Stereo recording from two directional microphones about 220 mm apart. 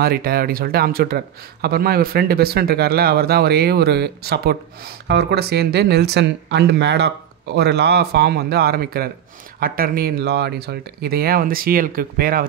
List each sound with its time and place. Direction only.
0.0 s speech: 45° right (ahead or behind)